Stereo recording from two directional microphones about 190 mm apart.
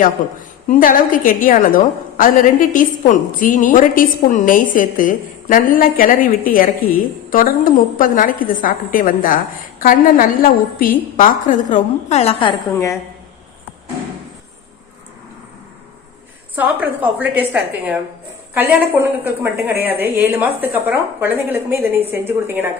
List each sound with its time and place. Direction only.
0.2 s a woman's voice: 45° left (ahead or behind); by 13.0 s 20° left (ahead or behind)
16.6 s a woman's voice: 10° right (ahead or behind)
18.5 s a woman's voice: 10° right (ahead or behind)